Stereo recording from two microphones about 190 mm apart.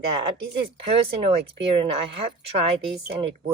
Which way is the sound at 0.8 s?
30° right (ahead or behind).